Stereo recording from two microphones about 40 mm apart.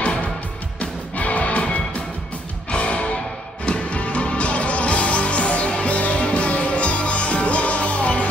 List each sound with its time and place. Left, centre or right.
0.7 s music: left